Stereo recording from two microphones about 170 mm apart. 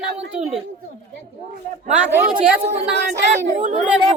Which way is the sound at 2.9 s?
90° right.